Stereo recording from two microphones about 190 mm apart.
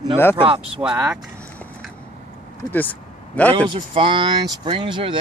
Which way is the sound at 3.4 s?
10° left (ahead or behind).